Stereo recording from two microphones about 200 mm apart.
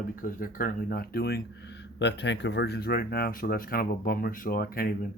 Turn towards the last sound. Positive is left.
turn(degrees=45)  # may be behind; listen again after turning